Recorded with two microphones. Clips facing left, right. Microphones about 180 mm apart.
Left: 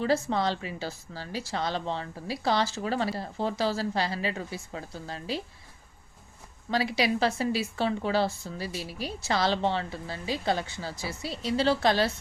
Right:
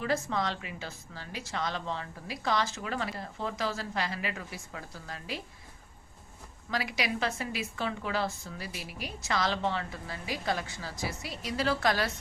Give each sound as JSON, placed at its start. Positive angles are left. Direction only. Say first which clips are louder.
{"t": 0.0, "sound": "a woman's voice", "louder": "left 5 dB", "side_deg": 30}
{"t": 6.7, "sound": "speech", "louder": "left 6 dB", "side_deg": 30}